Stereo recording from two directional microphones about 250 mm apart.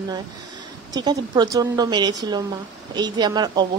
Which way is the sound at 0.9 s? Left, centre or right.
Centre.